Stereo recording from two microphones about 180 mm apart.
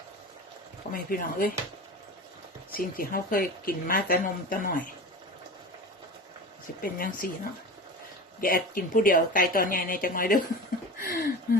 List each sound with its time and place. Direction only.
0.9 s a woman's voice: 50° left (ahead or behind)
2.7 s a woman's voice: 55° left (ahead or behind)
6.8 s a woman's voice: 55° left (ahead or behind)
8.4 s a woman's voice: 55° left (ahead or behind)
10.9 s a sound: 55° left (ahead or behind)